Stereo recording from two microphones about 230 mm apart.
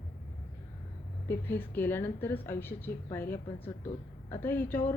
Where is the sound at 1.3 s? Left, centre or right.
Centre.